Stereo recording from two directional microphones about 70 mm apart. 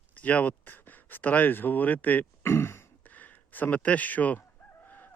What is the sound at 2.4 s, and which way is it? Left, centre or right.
Throat clearing, left.